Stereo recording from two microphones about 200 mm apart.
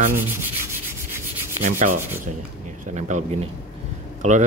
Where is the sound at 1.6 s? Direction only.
40° right (ahead or behind).